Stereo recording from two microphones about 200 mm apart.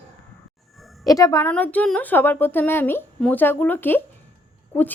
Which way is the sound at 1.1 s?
15° left (ahead or behind).